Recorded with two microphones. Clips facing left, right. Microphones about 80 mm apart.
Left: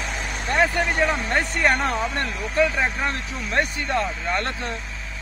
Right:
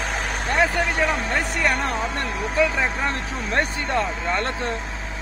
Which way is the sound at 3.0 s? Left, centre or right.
Right.